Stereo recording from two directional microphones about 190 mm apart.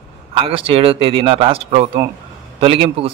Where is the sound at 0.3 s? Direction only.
30° right (ahead or behind).